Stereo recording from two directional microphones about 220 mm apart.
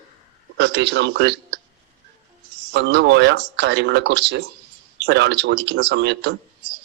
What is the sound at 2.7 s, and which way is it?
Speech, 55° right (ahead or behind).